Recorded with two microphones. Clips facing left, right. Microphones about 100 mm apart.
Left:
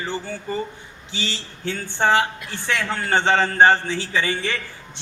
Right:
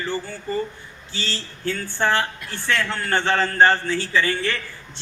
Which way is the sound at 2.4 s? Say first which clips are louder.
Right 1 dB; 20° left (ahead or behind).